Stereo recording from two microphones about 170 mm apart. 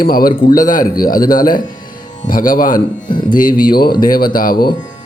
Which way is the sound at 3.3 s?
55° left (ahead or behind).